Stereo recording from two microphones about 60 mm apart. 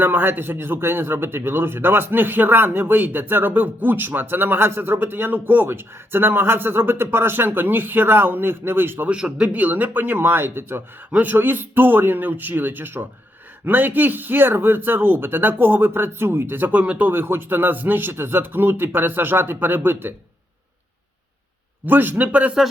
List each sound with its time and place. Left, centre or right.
0.0 s a man's voice: right
9.0 s a man's voice: centre
9.5 s a man's voice: right
11.1 s a man's voice: right
17.1 s a man's voice: right
21.8 s a man's voice: right